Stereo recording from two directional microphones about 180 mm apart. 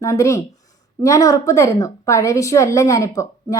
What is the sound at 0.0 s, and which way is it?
A woman's voice, 15° left (ahead or behind).